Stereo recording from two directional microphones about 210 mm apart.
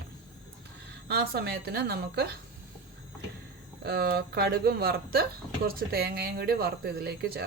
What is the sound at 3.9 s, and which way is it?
Speech, 50° right (ahead or behind).